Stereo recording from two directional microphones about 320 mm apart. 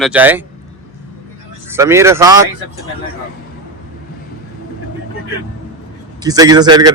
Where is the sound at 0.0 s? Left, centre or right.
Centre.